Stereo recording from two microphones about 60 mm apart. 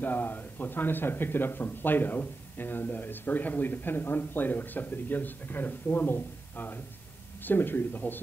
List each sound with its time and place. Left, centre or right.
0.0 s a man's voice: left